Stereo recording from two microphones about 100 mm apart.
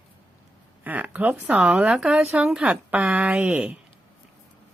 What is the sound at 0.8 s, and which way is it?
Speech, 15° right (ahead or behind).